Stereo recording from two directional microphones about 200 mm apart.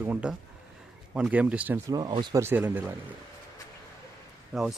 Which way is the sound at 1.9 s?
20° right (ahead or behind).